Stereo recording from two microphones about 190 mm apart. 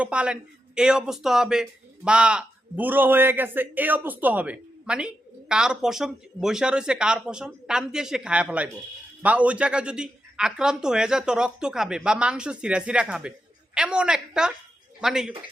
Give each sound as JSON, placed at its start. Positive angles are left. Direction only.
{"t": 0.0, "sound": "a man's voice", "side_deg": -5}